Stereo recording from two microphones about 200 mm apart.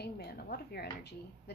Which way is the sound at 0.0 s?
50° left (ahead or behind).